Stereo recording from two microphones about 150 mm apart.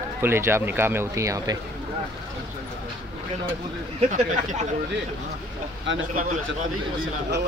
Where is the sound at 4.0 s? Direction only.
55° right (ahead or behind).